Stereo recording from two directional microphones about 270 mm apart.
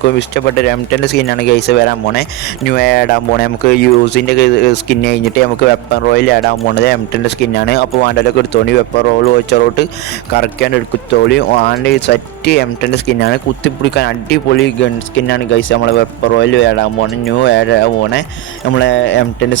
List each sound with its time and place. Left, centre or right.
0.0 s speech: left
11.1 s speech: left